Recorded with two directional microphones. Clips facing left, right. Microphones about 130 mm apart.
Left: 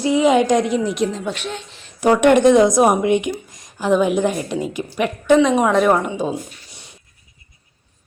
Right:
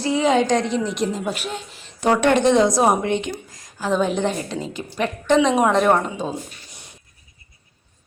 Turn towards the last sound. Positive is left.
turn(degrees=0)  # may be behind; listen again after turning